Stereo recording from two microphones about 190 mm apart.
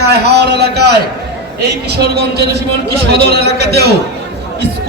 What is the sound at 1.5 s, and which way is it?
A man's voice, 60° right (ahead or behind).